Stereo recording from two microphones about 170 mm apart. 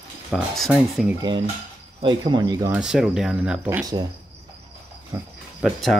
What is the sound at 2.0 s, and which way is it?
Speech, 25° right (ahead or behind).